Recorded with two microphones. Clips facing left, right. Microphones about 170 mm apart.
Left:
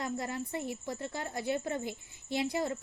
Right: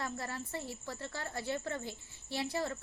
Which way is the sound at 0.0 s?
20° left (ahead or behind).